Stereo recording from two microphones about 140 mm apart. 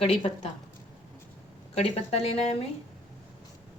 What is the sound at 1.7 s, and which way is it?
Speech, 45° left (ahead or behind).